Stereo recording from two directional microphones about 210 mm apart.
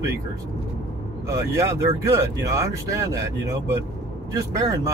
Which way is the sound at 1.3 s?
15° right (ahead or behind).